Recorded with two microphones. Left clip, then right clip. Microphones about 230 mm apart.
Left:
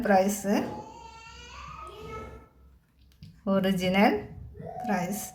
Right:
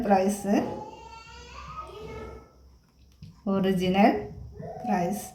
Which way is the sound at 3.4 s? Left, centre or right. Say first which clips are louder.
Even; left.